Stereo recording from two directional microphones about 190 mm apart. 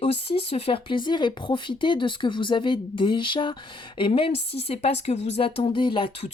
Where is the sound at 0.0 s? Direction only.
30° left (ahead or behind).